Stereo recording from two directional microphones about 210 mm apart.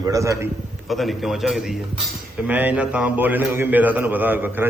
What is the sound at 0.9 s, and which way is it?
A man's voice, centre (ahead or behind).